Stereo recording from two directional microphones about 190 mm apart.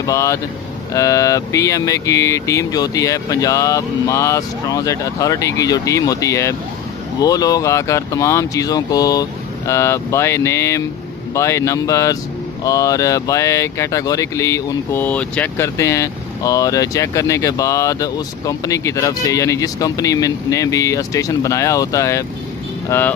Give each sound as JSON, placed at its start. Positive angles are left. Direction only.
{"t": 0.0, "sound": "speech", "side_deg": 15}